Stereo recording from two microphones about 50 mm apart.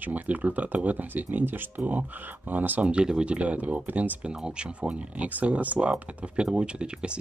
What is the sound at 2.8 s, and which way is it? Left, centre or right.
Speech, centre.